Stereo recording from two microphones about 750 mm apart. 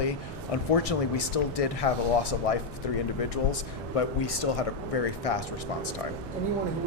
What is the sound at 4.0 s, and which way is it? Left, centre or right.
Speech, left.